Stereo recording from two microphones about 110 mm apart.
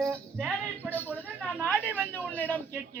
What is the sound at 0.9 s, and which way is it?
A woman's voice, 15° left (ahead or behind).